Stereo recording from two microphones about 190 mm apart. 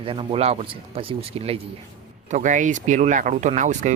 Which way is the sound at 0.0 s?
30° right (ahead or behind).